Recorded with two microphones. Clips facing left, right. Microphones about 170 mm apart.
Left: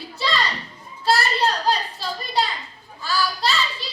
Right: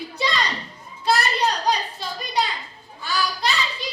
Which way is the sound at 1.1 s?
15° right (ahead or behind).